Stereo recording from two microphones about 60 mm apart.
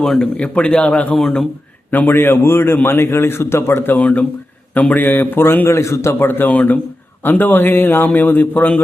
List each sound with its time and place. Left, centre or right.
0.0 s a man's voice: centre
1.9 s a man's voice: left
3.9 s a man's voice: left
6.5 s a man's voice: left